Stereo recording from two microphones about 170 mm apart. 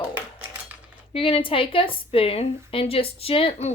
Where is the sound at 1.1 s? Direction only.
35° left (ahead or behind).